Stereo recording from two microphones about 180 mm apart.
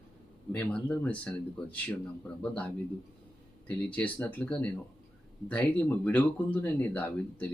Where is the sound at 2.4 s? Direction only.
5° left (ahead or behind).